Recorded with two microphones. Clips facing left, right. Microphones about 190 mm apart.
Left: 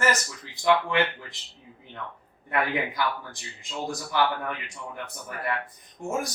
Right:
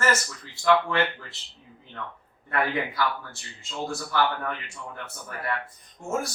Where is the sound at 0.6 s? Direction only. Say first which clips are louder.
Right 1 dB; 15° left (ahead or behind).